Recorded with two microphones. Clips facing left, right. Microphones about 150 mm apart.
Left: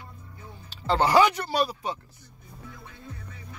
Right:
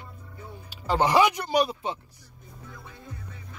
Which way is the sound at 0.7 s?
10° right (ahead or behind).